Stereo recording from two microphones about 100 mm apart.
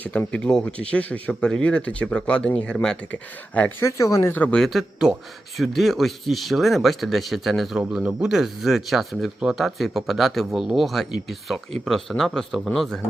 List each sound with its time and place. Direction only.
0.0 s speech: 15° left (ahead or behind)
3.8 s speech: 30° left (ahead or behind)
4.4 s speech: 15° left (ahead or behind)
4.6 s speech: centre (ahead or behind)
7.8 s speech: 10° right (ahead or behind); by 13.0 s 5° left (ahead or behind)